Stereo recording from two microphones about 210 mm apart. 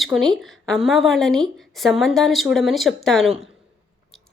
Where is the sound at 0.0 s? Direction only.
Centre (ahead or behind).